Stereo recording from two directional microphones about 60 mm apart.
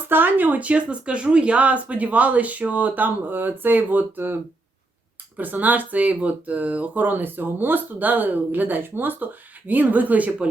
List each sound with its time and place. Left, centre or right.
0.1 s speech: right
5.4 s speech: right